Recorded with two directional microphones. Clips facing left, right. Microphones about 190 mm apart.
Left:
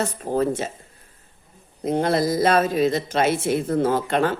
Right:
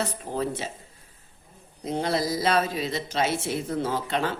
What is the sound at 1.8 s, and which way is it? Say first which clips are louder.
A man's voice: left 6 dB; 55° left (ahead or behind).